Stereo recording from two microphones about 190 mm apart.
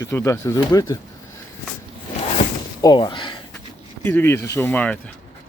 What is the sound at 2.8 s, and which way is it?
Speech, 20° left (ahead or behind).